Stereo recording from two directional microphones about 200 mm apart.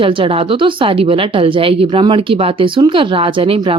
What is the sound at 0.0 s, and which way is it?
Speech, 25° right (ahead or behind).